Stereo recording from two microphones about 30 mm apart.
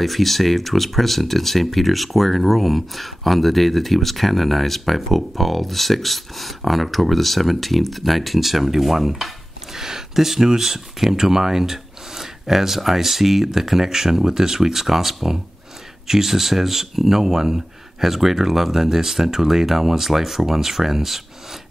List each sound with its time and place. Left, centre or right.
0.0 s speech: centre
9.8 s speech: centre